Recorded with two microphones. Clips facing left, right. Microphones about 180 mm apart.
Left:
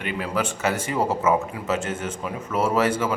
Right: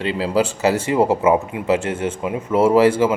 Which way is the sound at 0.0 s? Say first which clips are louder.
Right 7 dB; 30° right (ahead or behind).